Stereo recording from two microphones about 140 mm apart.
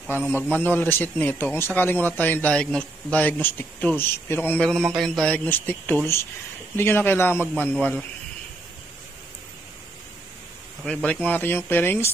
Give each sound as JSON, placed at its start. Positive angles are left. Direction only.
{"t": 0.3, "sound": "a man's voice", "side_deg": 15}
{"t": 10.8, "sound": "a man's voice", "side_deg": 5}